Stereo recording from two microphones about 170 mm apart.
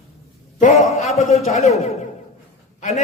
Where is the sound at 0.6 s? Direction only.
40° left (ahead or behind).